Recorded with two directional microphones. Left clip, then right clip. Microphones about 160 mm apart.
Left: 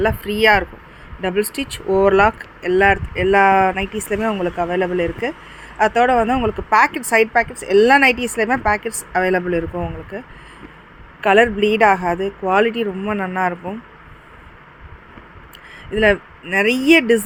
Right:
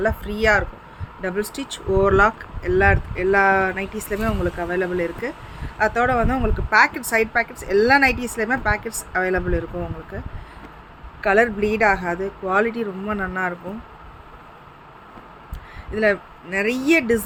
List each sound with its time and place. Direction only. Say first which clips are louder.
0.0 s speech: left 5 dB; 35° left (ahead or behind)
16.0 s speech: left 4 dB; 35° left (ahead or behind)